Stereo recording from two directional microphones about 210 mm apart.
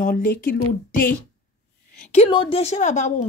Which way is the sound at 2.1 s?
25° left (ahead or behind).